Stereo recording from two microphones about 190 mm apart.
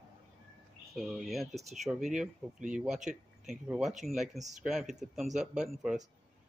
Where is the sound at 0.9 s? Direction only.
Centre (ahead or behind).